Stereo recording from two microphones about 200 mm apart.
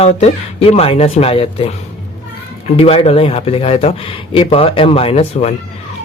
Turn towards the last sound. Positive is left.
turn(degrees=30)  # may be behind; listen again after turning